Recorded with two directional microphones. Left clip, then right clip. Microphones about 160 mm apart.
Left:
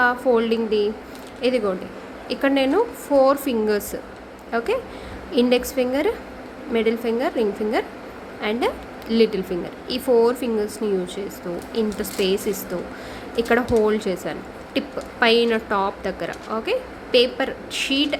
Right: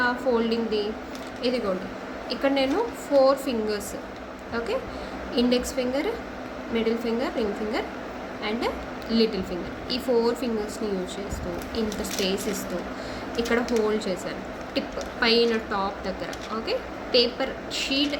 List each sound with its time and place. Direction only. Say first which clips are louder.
0.0 s a woman's voice: left 5 dB; 85° left
10.8 s speech: left 7 dB; 70° left (ahead or behind)
11.7 s speech: left 5 dB; 90° left